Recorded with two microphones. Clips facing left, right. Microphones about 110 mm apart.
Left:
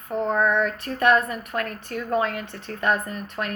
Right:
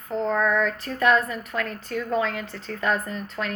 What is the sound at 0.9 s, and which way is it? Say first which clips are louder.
A woman's voice: left 1 dB; 55° left (ahead or behind).